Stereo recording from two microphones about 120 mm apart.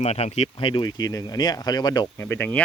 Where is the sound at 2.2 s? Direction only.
15° left (ahead or behind).